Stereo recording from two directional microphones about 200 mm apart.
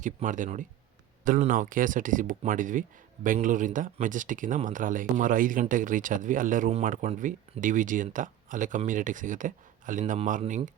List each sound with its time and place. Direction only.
0.0 s speech: 40° right (ahead or behind)